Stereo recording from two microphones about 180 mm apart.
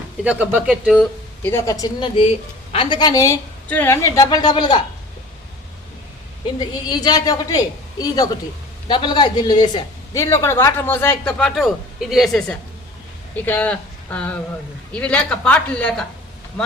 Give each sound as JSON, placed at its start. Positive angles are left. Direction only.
{"t": 0.3, "sound": "speech", "side_deg": -5}
{"t": 1.4, "sound": "a woman's voice", "side_deg": 15}
{"t": 6.6, "sound": "a woman's voice", "side_deg": 25}